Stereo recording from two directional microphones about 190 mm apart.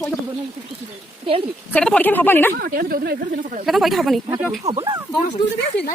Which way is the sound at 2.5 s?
55° right (ahead or behind).